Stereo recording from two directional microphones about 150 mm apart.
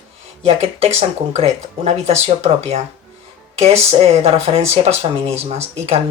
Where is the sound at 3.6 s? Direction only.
45° right (ahead or behind).